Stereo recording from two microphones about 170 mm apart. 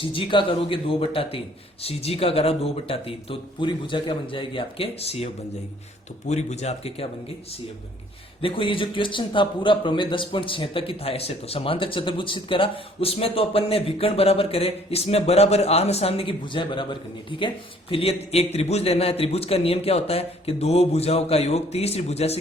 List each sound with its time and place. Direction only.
0.1 s a man's voice: 30° left (ahead or behind)
8.4 s a man's voice: 30° left (ahead or behind)